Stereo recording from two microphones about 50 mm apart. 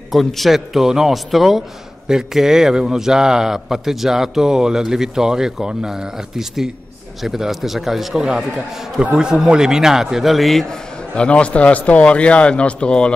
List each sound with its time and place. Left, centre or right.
0.1 s a man's voice: centre
11.1 s a man's voice: left